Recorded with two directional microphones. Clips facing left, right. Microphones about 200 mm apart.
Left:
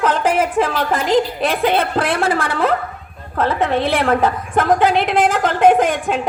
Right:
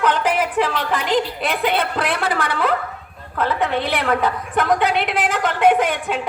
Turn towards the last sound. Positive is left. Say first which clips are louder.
# left 4 dB
turn(degrees=45)  # may be behind; listen again after turning